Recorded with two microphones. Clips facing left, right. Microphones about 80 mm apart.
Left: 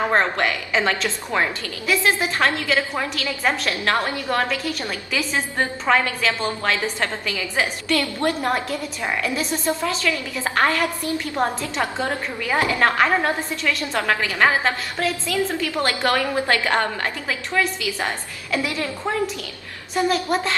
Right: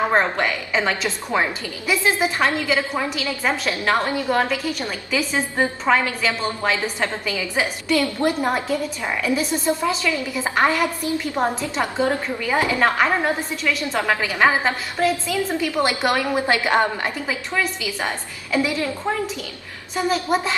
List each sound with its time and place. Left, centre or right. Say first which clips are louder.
0.1 s a woman's voice: even; centre
10.0 s a woman's voice: right 1 dB; centre
12.7 s a woman's voice: left 2 dB; centre
18.5 s a woman's voice: right 3 dB; centre